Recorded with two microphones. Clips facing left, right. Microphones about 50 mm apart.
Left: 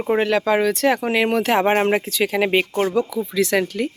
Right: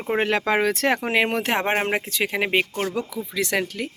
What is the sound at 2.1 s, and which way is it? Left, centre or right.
Speech, centre.